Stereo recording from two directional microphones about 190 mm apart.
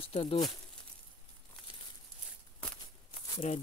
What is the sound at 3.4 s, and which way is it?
Speech, 40° left (ahead or behind).